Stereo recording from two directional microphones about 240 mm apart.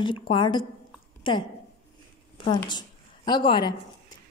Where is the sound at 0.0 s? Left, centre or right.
Left.